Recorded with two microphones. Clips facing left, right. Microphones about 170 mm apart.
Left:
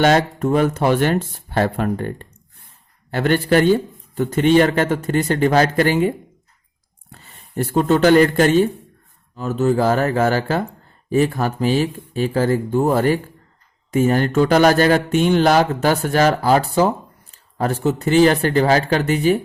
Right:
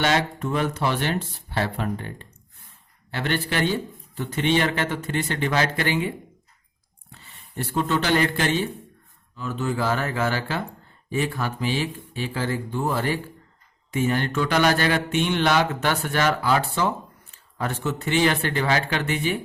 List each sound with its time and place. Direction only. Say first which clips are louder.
0.0 s a man's voice: left 7 dB; 45° left (ahead or behind)